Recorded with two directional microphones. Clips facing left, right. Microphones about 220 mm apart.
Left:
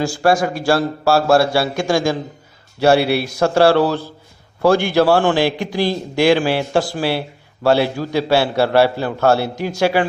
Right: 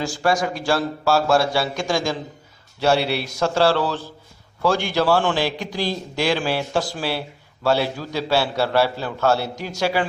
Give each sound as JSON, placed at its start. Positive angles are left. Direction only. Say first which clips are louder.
{"t": 0.2, "sound": "a man's voice", "louder": "left 4 dB", "side_deg": 50}
{"t": 3.0, "sound": "a man's voice", "louder": "left 6 dB", "side_deg": 10}
{"t": 3.4, "sound": "a man's voice", "louder": "left 6 dB", "side_deg": 55}